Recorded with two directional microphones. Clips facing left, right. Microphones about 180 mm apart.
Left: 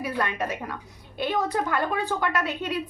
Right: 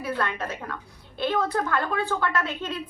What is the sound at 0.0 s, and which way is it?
A woman's voice, 15° left (ahead or behind).